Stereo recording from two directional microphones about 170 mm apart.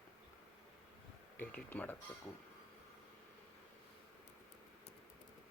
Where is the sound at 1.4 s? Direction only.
10° left (ahead or behind).